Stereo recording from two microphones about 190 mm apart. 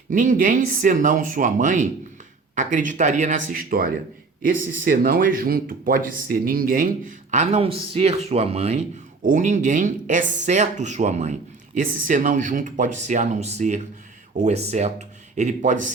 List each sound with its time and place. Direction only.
0.1 s speech: 45° right (ahead or behind)
7.3 s speech: 35° right (ahead or behind)